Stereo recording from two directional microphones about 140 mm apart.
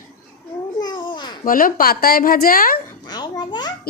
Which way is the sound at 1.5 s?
85° left.